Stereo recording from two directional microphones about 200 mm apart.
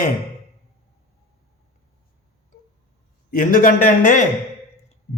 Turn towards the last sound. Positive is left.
turn(degrees=40)  # may be behind; listen again after turning